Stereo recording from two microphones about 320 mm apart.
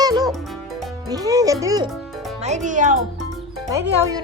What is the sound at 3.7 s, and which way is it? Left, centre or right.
Speech, centre.